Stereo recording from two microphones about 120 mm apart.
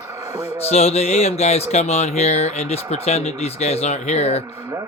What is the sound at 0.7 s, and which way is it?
Speech, 60° left (ahead or behind).